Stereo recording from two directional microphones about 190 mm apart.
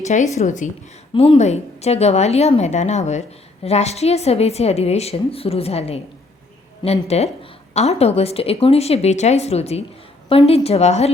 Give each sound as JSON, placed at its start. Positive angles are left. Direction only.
{"t": 0.0, "sound": "a woman's voice", "side_deg": 40}
{"t": 1.1, "sound": "a woman's voice", "side_deg": 30}